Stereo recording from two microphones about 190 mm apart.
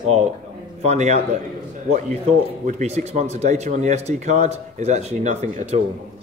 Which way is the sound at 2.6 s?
40° right (ahead or behind).